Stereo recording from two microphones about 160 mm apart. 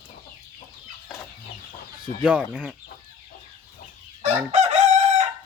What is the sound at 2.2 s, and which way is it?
Speech, 10° right (ahead or behind).